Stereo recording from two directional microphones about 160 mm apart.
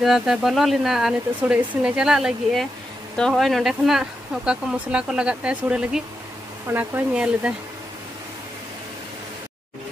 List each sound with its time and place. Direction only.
0.0 s speech: centre (ahead or behind)